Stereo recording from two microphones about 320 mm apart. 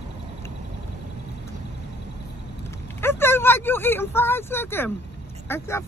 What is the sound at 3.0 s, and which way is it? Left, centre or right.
Speech, centre.